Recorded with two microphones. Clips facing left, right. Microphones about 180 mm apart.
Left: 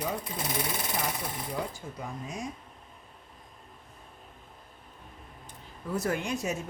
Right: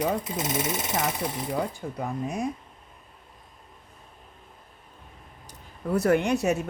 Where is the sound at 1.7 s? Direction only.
60° right (ahead or behind).